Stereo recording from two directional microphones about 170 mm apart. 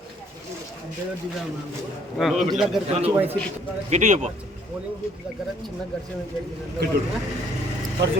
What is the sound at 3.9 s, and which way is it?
Speech, 45° right (ahead or behind).